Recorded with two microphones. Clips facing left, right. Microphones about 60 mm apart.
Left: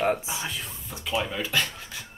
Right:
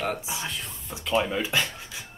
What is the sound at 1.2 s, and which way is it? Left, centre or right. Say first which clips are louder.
Speech: right 1 dB; centre.